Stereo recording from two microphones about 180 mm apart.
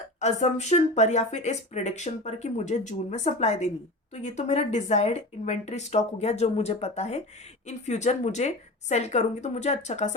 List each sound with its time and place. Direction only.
0.2 s speech: 40° left (ahead or behind)